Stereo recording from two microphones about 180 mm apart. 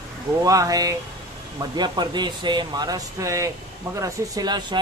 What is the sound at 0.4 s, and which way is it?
A man's voice, 20° right (ahead or behind).